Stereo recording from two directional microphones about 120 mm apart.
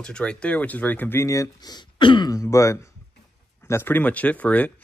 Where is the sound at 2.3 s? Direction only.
25° left (ahead or behind).